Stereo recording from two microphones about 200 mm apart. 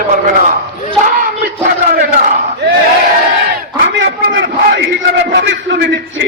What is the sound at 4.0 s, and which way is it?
A man's voice, 60° right (ahead or behind).